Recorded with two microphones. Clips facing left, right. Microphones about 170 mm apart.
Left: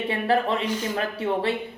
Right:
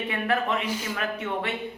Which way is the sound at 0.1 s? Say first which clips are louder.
Left 3 dB; 30° left (ahead or behind).